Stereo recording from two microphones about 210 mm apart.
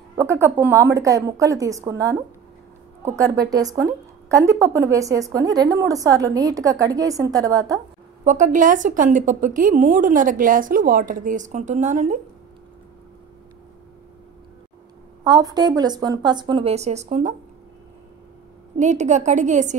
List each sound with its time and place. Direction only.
0.2 s a woman's voice: 15° right (ahead or behind)
8.2 s a woman's voice: 35° right (ahead or behind)
15.2 s speech: 20° right (ahead or behind); by 17.4 s 35° right (ahead or behind)
18.8 s a woman's voice: 35° right (ahead or behind)